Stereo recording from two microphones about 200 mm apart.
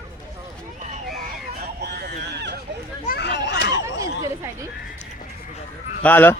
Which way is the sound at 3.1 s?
55° left (ahead or behind).